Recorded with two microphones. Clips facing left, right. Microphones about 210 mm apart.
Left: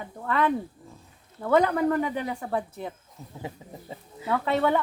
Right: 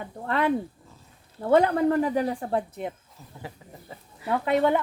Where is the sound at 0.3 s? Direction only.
30° right (ahead or behind).